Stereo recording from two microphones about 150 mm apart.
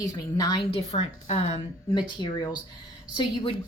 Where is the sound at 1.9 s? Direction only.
30° left (ahead or behind).